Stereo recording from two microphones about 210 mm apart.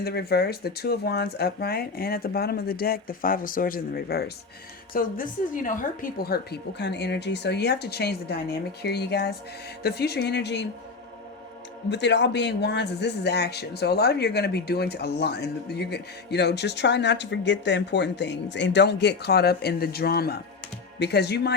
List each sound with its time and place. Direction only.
0.0 s speech: 50° left (ahead or behind)
11.9 s speech: 55° left (ahead or behind)